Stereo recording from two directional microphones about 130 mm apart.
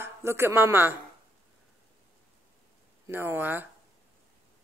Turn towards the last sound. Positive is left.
turn(degrees=-15)  # may be behind; listen again after turning